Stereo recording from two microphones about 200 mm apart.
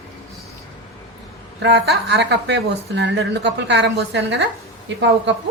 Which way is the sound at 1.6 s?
55° right (ahead or behind).